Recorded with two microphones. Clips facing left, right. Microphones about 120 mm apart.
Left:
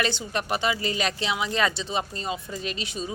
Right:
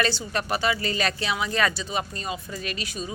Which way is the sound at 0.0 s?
20° left (ahead or behind).